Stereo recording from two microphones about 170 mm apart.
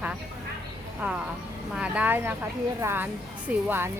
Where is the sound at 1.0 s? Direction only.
10° right (ahead or behind).